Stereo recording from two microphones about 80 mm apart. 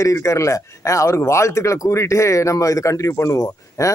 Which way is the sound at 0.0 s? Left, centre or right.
Left.